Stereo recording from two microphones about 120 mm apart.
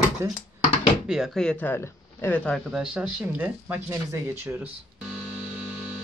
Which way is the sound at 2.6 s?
5° right (ahead or behind).